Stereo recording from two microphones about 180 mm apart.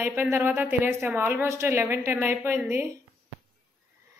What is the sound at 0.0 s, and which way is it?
A woman's voice, 10° right (ahead or behind).